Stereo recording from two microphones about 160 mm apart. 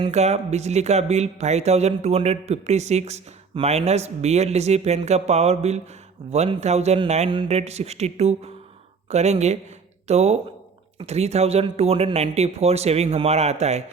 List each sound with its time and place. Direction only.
0.1 s speech: 45° right (ahead or behind)